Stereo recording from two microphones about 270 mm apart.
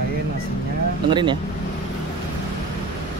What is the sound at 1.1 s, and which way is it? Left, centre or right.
Speech, centre.